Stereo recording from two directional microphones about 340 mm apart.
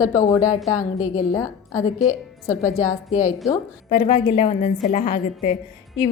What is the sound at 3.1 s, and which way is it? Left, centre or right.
A woman's voice, left.